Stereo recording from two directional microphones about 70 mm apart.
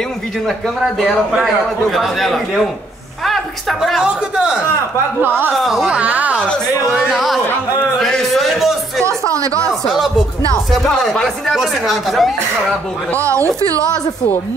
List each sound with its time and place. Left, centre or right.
0.5 s a man's voice: centre
3.3 s a sound: centre
4.0 s speech: centre
5.6 s a man's voice: centre
5.9 s speech: centre
6.9 s a man's voice: centre
8.0 s a sound: centre
9.0 s a sound: right
9.7 s music: centre
10.7 s a man's voice: centre
13.2 s a woman's voice: right